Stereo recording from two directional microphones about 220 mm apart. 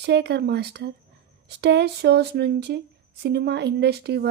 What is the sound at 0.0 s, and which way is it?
A woman's voice, 50° right (ahead or behind).